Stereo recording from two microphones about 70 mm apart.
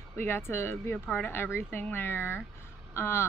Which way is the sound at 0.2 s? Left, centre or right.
Left.